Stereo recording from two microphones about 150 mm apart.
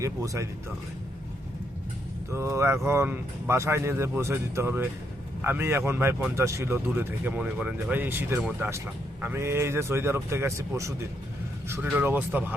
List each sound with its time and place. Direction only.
0.0 s speech: 20° right (ahead or behind)
2.3 s speech: 15° right (ahead or behind)